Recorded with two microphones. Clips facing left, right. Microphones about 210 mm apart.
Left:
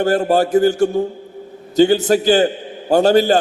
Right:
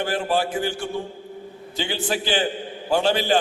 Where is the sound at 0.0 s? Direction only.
40° left (ahead or behind).